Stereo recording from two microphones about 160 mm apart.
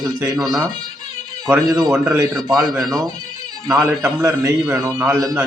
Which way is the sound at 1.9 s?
5° right (ahead or behind).